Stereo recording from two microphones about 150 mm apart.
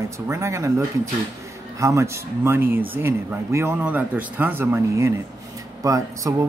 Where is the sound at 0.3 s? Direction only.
20° right (ahead or behind).